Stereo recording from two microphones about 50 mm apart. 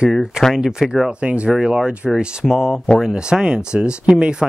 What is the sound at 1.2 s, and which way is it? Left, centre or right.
Speech, right.